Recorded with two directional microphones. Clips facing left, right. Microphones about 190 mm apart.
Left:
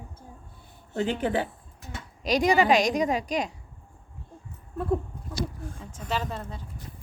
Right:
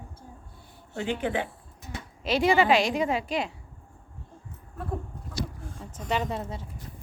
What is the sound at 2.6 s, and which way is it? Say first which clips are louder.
Speech: left 1 dB; 40° left (ahead or behind).